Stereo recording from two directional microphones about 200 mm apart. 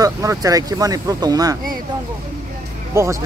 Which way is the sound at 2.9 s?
15° right (ahead or behind).